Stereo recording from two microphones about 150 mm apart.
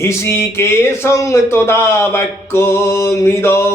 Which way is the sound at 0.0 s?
20° left (ahead or behind).